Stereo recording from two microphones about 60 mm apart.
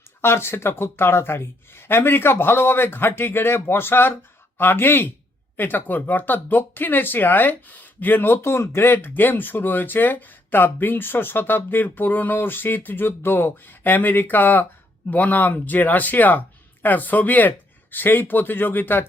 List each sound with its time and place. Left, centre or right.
0.2 s speech: left